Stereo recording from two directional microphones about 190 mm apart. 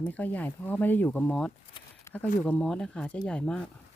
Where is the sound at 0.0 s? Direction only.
10° left (ahead or behind).